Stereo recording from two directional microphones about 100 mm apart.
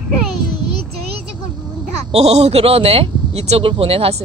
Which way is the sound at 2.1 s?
90° right.